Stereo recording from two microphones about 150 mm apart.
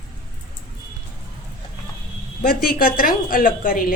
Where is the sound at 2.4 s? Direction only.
75° left (ahead or behind).